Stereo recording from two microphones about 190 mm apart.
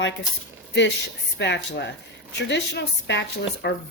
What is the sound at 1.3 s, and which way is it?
A woman's voice, 65° left (ahead or behind).